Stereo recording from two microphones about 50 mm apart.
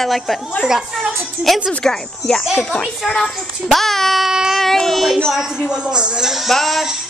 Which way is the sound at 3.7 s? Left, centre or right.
Centre.